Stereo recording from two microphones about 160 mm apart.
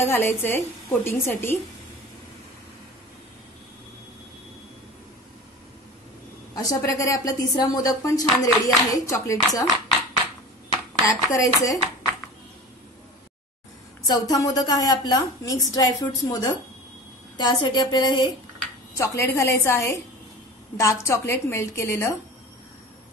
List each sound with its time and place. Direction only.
0.0 s a woman's voice: 15° left (ahead or behind)
6.5 s speech: 20° left (ahead or behind)
11.1 s speech: 20° left (ahead or behind)
14.0 s speech: 25° left (ahead or behind)
18.9 s a woman's voice: 15° left (ahead or behind)